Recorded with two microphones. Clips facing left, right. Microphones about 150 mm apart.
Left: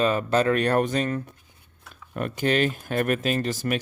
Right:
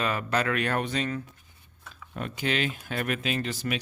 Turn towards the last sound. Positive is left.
turn(degrees=45)  # may be behind; listen again after turning